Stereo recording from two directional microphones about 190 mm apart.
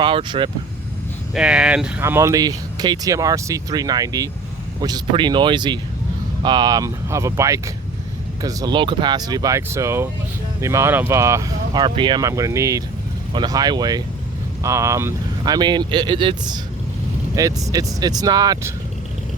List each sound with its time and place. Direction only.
0.0 s speech: 25° right (ahead or behind)
1.3 s speech: 5° right (ahead or behind)